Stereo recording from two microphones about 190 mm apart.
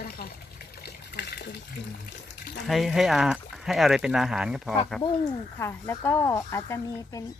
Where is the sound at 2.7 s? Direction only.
Centre (ahead or behind); by 7.2 s 15° left (ahead or behind).